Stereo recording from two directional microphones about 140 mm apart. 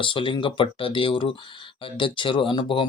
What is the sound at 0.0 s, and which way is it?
Speech, 35° left (ahead or behind).